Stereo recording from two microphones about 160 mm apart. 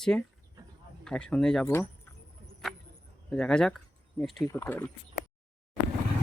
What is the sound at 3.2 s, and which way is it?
Speech, 5° left (ahead or behind).